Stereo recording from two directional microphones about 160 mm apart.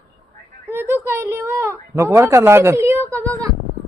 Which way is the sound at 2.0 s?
15° right (ahead or behind).